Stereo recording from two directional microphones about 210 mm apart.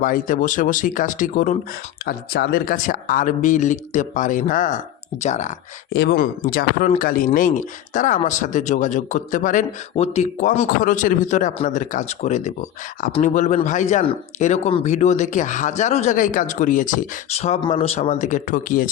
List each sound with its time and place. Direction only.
0.0 s speech: 40° left (ahead or behind)
5.9 s speech: 55° left (ahead or behind)